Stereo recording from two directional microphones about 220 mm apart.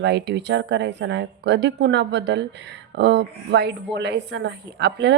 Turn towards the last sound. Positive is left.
turn(degrees=-50)  # may be behind; listen again after turning